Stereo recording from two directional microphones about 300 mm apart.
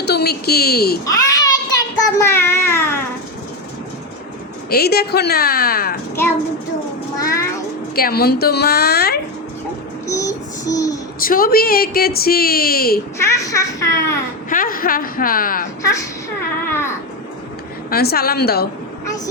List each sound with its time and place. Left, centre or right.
0.0 s a woman's voice: left
1.0 s a sound: centre
2.2 s speech: centre
4.7 s a woman's voice: left
7.2 s cat: centre
7.9 s a woman's voice: left
10.1 s child singing: centre
11.2 s speech: left
13.1 s speech: centre
14.5 s speech: left
17.9 s a woman's voice: left
19.0 s vehicle: centre